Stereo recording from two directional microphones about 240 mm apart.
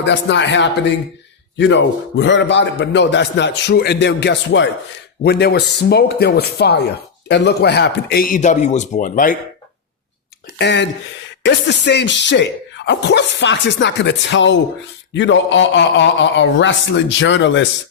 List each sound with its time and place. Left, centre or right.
0.0 s a man's voice: left
10.6 s a man's voice: left